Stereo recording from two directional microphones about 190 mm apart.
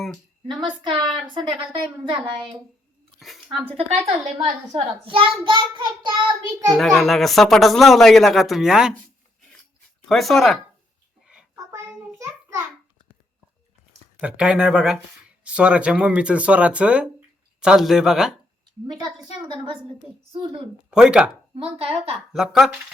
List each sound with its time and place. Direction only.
0.6 s a child's voice: 25° right (ahead or behind)
3.2 s a sound: centre (ahead or behind)
3.8 s a child's voice: 35° right (ahead or behind)
6.7 s speech: centre (ahead or behind)
10.1 s speech: centre (ahead or behind)
11.5 s a sound: 15° right (ahead or behind)
14.2 s speech: 5° right (ahead or behind)
20.9 s speech: 5° right (ahead or behind)
21.5 s speech: 30° right (ahead or behind)
22.3 s speech: centre (ahead or behind)